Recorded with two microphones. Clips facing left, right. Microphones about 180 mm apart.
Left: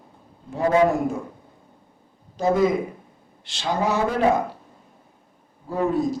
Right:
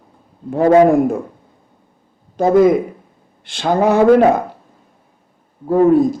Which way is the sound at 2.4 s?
55° right (ahead or behind).